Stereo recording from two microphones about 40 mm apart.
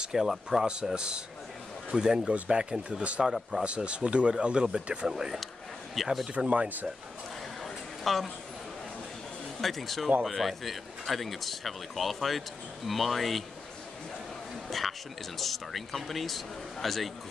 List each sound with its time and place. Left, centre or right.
0.1 s speech: centre
0.9 s speech: right
2.3 s speech: right
3.3 s speech: centre
3.6 s speech: right
5.0 s speech: centre
6.0 s speech: centre
6.3 s speech: right
7.6 s a sound: centre
9.6 s speech: centre
14.7 s speech: centre